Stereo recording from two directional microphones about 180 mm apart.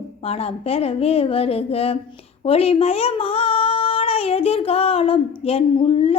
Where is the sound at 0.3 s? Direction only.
35° left (ahead or behind).